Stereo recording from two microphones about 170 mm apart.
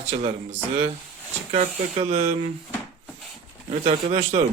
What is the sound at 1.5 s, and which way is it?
Speech, 35° right (ahead or behind).